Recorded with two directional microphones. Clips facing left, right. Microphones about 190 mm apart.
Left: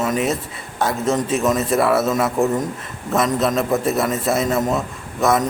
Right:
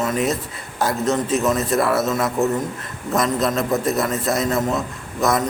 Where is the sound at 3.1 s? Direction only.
Centre (ahead or behind).